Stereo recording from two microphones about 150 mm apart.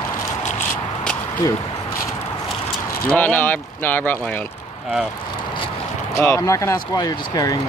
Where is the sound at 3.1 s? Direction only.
10° left (ahead or behind).